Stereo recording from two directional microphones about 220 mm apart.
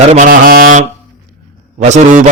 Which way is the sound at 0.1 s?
35° right (ahead or behind).